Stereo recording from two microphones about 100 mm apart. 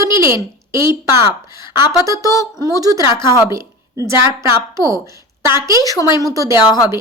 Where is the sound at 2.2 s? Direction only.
35° left (ahead or behind).